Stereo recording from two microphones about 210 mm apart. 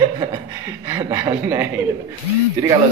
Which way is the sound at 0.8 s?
15° right (ahead or behind).